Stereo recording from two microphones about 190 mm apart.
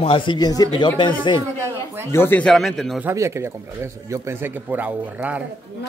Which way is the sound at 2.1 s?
10° left (ahead or behind).